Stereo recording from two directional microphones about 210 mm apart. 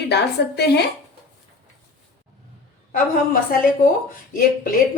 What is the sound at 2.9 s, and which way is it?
A woman's voice, 45° left (ahead or behind).